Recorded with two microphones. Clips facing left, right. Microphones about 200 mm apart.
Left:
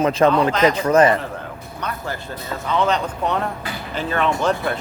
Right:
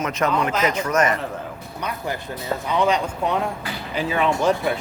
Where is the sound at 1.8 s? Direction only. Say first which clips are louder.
Even; 10° right (ahead or behind).